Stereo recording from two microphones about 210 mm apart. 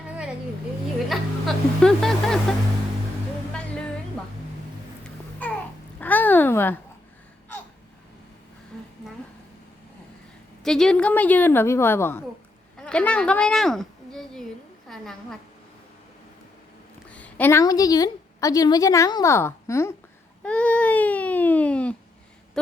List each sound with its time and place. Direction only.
0.9 s music: centre (ahead or behind)
5.4 s babbling: 10° left (ahead or behind)
6.0 s a sound: 10° left (ahead or behind)
10.6 s a woman's voice: centre (ahead or behind)
12.7 s a sound: 5° left (ahead or behind)
14.8 s a woman's voice: centre (ahead or behind)
17.1 s a woman's voice: 5° left (ahead or behind)
20.4 s baby cry: 5° left (ahead or behind)
22.6 s speech: 5° left (ahead or behind)